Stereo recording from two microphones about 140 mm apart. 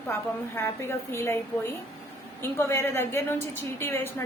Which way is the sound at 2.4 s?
20° left (ahead or behind).